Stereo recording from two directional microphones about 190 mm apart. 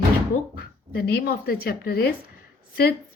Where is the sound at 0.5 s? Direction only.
50° left (ahead or behind).